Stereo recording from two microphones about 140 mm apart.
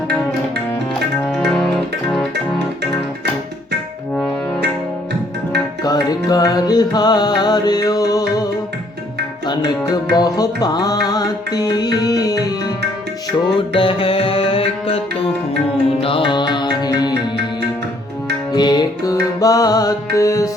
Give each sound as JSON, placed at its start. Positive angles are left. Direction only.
{"t": 1.5, "sound": "music", "side_deg": 0}
{"t": 5.8, "sound": "music", "side_deg": 25}
{"t": 9.5, "sound": "music", "side_deg": 30}
{"t": 13.6, "sound": "music", "side_deg": 40}
{"t": 18.5, "sound": "music", "side_deg": 30}